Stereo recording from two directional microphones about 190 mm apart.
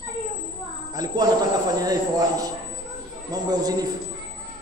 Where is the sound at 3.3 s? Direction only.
20° right (ahead or behind).